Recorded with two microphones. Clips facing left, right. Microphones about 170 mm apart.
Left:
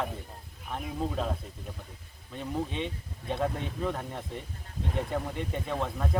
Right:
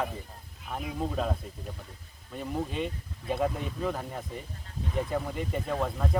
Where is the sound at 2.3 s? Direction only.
5° right (ahead or behind).